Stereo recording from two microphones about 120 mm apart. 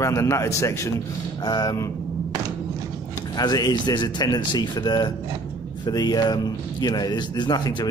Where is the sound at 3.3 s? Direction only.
30° left (ahead or behind).